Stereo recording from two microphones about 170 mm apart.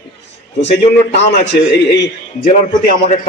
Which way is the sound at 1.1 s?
85° left.